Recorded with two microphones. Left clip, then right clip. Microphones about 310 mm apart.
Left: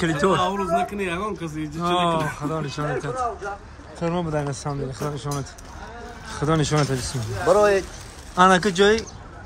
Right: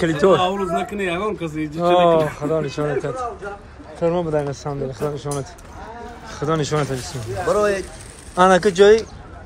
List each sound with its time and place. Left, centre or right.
0.0 s speech: centre